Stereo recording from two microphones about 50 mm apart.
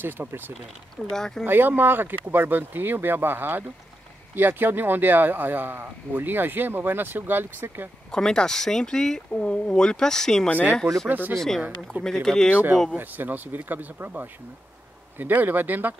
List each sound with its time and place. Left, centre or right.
0.0 s speech: right
1.1 s speech: centre
1.4 s speech: right
8.1 s speech: centre
11.1 s speech: right
11.3 s speech: centre
12.9 s speech: right